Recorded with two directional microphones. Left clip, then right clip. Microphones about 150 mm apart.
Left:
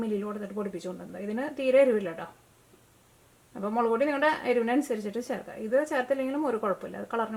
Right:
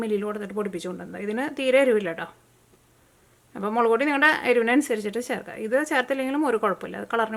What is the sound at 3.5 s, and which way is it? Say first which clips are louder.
Speech: right 5 dB; 40° right (ahead or behind).